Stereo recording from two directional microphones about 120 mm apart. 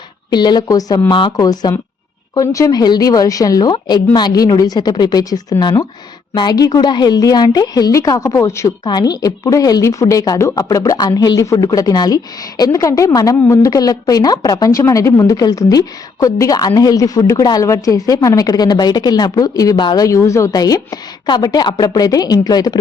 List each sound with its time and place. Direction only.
0.3 s a woman's voice: 35° left (ahead or behind)
20.1 s a woman's voice: 25° left (ahead or behind)